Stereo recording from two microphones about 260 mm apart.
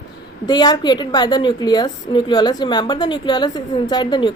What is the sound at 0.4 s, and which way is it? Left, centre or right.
A woman's voice, centre.